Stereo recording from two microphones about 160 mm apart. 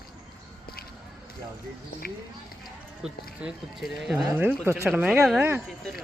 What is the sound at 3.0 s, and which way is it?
Speech, 5° right (ahead or behind).